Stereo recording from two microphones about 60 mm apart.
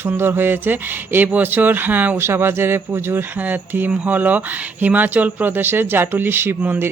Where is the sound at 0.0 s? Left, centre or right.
Right.